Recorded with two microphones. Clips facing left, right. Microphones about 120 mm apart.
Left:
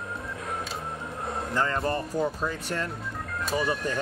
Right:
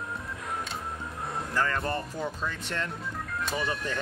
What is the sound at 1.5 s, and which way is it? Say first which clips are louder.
Speech: left 2 dB; 20° left (ahead or behind).